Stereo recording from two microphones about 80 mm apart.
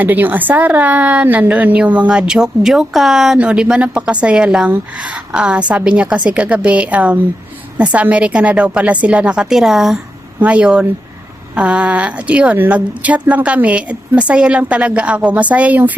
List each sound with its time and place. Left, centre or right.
0.0 s a woman's voice: right; by 10.0 s centre
10.4 s a woman's voice: centre